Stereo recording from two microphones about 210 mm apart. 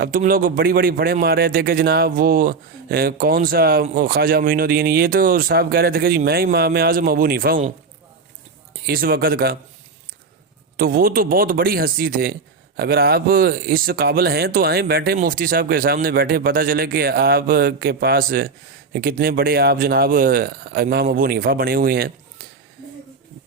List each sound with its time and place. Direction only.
0.0 s a man's voice: 40° right (ahead or behind)
8.9 s a man's voice: 45° right (ahead or behind)
10.8 s a man's voice: 45° right (ahead or behind)